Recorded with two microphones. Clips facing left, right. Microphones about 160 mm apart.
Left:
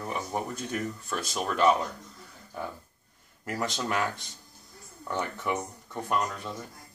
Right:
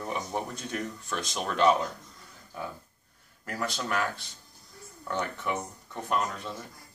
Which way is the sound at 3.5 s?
15° left (ahead or behind).